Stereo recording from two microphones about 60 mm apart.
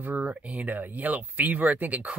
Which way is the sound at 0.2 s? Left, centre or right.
Right.